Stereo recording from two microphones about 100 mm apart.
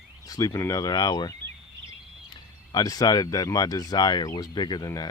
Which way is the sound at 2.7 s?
40° left (ahead or behind).